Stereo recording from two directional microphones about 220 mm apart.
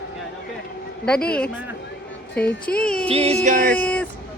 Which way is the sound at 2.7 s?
5° left (ahead or behind).